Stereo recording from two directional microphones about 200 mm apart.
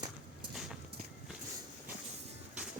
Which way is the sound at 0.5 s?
5° right (ahead or behind).